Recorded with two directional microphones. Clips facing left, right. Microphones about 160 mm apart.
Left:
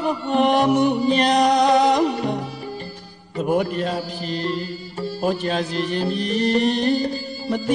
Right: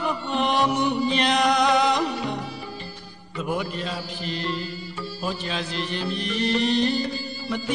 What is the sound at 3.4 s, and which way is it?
Music, 50° left (ahead or behind).